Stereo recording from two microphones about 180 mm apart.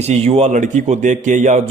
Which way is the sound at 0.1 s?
35° right (ahead or behind).